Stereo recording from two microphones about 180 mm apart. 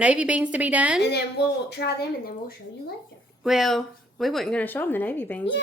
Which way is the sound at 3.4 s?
Centre (ahead or behind).